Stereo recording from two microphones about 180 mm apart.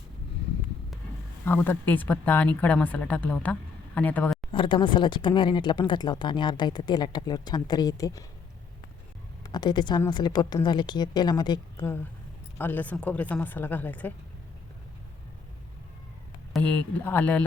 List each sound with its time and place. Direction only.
1.5 s speech: 10° left (ahead or behind)
4.5 s speech: 25° left (ahead or behind)
9.4 s speech: 25° left (ahead or behind)
12.5 s speech: 10° left (ahead or behind)
16.5 s speech: 10° left (ahead or behind)